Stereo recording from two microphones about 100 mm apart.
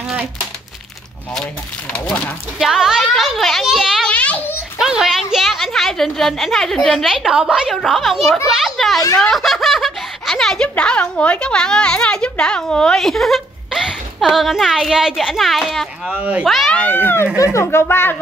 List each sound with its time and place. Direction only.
1.3 s speech: 10° left (ahead or behind)
2.6 s a woman's voice: 5° right (ahead or behind)
4.0 s a sound: 15° left (ahead or behind)
4.7 s a woman's voice: 5° right (ahead or behind)
16.1 s speech: 15° right (ahead or behind)
16.4 s a woman's voice: centre (ahead or behind)
16.7 s a child's voice: 15° left (ahead or behind)